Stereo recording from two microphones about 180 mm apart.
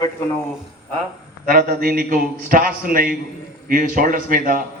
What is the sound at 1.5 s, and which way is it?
A man's voice, 55° right (ahead or behind).